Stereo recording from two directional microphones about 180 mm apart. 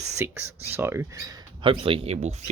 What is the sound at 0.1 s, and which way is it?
Speech, 15° right (ahead or behind).